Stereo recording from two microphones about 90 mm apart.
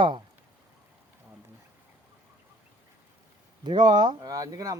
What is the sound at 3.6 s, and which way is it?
Speech, 60° right (ahead or behind).